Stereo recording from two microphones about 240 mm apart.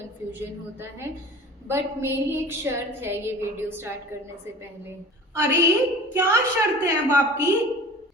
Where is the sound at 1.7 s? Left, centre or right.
Centre.